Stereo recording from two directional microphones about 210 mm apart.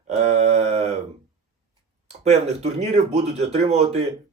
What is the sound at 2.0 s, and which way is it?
Speech, 30° right (ahead or behind).